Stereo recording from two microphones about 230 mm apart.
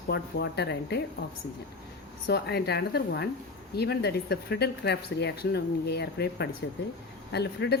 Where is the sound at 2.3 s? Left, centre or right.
Left.